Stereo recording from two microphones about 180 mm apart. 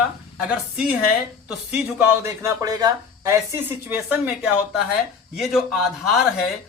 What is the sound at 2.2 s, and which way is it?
A man's voice, 15° right (ahead or behind).